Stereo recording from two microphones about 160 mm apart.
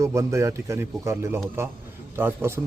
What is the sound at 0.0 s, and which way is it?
A man's voice, 20° right (ahead or behind).